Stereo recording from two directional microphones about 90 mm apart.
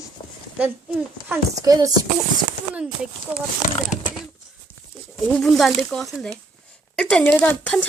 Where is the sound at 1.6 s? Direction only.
40° right (ahead or behind).